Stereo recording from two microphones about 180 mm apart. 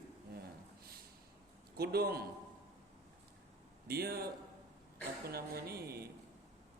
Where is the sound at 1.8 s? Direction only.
60° right (ahead or behind).